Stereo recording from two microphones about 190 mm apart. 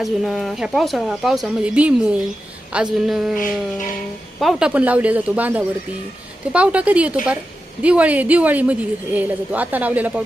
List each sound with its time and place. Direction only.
0.0 s speech: centre (ahead or behind)
3.3 s a sound: 45° left (ahead or behind)
4.4 s a woman's voice: centre (ahead or behind)